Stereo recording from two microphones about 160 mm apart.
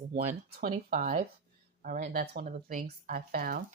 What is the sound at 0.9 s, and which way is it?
Speech, 55° right (ahead or behind).